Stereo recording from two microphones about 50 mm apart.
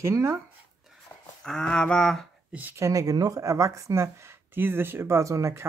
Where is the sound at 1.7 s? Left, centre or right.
Centre.